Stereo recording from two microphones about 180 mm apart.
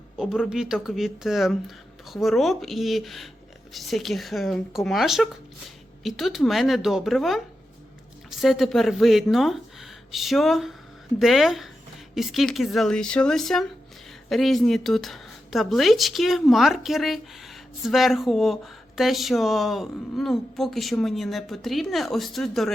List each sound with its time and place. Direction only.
0.2 s a woman's voice: 5° right (ahead or behind)